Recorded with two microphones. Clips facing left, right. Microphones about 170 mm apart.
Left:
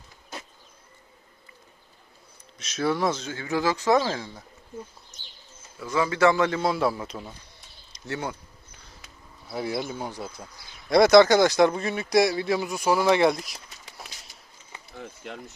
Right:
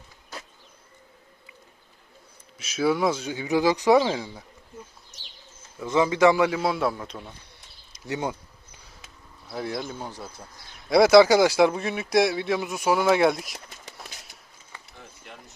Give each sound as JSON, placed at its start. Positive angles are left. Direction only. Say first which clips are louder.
{"t": 2.6, "sound": "speech", "louder": "right 2 dB", "side_deg": -5}
{"t": 5.8, "sound": "speech", "louder": "right 2 dB", "side_deg": -20}
{"t": 7.9, "sound": "speech", "louder": "right 3 dB", "side_deg": -15}
{"t": 9.5, "sound": "speech", "louder": "left 2 dB", "side_deg": 5}
{"t": 10.8, "sound": "speech", "louder": "right 1 dB", "side_deg": -5}
{"t": 14.9, "sound": "a sound", "louder": "left 9 dB", "side_deg": 60}